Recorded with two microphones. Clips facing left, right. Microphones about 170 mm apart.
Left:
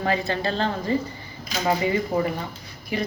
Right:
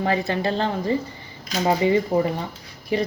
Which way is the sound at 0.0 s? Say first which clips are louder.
Right 2 dB; 20° right (ahead or behind).